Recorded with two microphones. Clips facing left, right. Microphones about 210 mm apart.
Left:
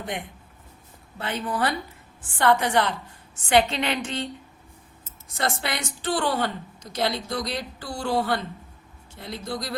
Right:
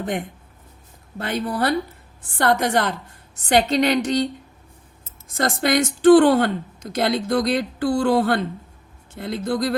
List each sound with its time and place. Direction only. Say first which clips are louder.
0.0 s a woman's voice: right 7 dB; 45° right (ahead or behind)
5.4 s speech: right 9 dB; 45° right (ahead or behind)